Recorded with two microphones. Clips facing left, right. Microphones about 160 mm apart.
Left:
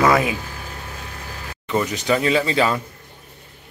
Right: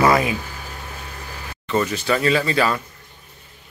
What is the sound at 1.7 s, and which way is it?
Speech, 15° left (ahead or behind).